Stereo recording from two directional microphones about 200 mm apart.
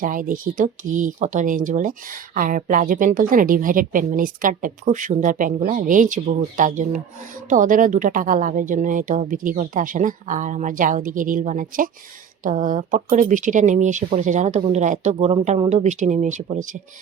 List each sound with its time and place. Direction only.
0.0 s speech: 40° right (ahead or behind)